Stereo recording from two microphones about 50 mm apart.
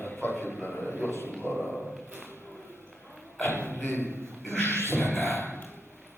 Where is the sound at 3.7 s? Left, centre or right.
Left.